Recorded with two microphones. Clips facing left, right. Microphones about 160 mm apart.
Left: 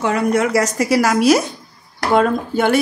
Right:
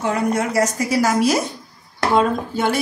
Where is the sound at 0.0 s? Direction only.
75° left (ahead or behind).